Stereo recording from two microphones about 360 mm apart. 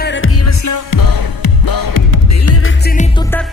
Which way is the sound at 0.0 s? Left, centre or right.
Left.